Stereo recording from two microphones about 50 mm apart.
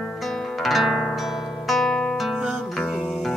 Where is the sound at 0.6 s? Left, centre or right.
Centre.